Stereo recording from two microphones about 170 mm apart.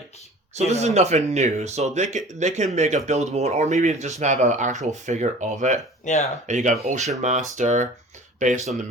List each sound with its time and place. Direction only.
0.5 s speech: 40° right (ahead or behind)
6.1 s speech: 45° left (ahead or behind)
6.5 s speech: 45° right (ahead or behind)